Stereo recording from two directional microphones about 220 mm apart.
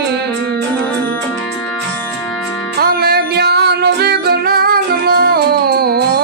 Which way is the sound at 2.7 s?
45° right (ahead or behind).